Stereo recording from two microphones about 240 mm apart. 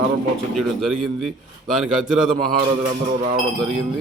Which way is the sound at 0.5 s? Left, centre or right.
Centre.